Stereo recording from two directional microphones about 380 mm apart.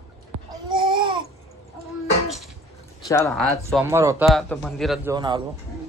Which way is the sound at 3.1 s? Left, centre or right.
Centre.